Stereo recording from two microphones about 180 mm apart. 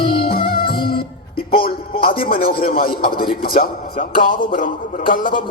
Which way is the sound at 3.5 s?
50° left (ahead or behind).